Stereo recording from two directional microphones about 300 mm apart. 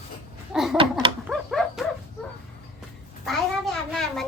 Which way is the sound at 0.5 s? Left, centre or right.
Centre.